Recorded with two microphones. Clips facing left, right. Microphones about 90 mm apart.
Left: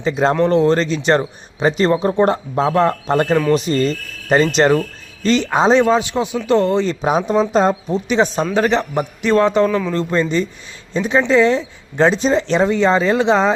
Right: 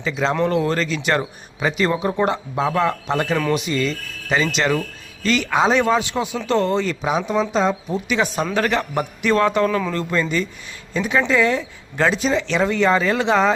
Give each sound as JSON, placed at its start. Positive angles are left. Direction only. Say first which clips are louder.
{"t": 0.0, "sound": "a man's voice", "louder": "left 5 dB", "side_deg": 40}
{"t": 0.4, "sound": "a man's voice", "louder": "left 6 dB", "side_deg": 30}
{"t": 5.7, "sound": "a man's voice", "louder": "left 4 dB", "side_deg": 20}
{"t": 7.0, "sound": "speech", "louder": "left 4 dB", "side_deg": 45}
{"t": 7.9, "sound": "a man's voice", "louder": "left 4 dB", "side_deg": 30}
{"t": 12.3, "sound": "a man's voice", "louder": "left 4 dB", "side_deg": 35}
{"t": 12.6, "sound": "a man's voice", "louder": "left 1 dB", "side_deg": 20}